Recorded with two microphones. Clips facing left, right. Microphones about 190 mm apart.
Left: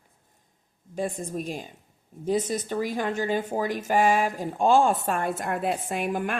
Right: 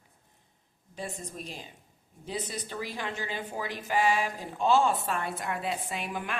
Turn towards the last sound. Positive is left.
turn(degrees=50)  # may be behind; listen again after turning